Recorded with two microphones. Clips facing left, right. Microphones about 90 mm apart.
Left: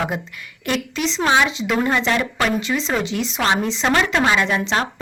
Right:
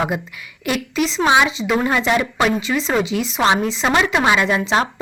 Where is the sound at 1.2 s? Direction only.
15° right (ahead or behind).